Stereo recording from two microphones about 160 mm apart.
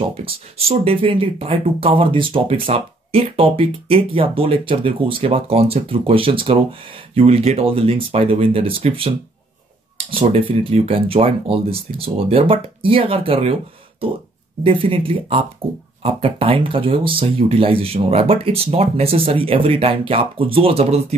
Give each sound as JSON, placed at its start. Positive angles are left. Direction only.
{"t": 0.0, "sound": "speech", "side_deg": -35}
{"t": 14.6, "sound": "speech", "side_deg": -35}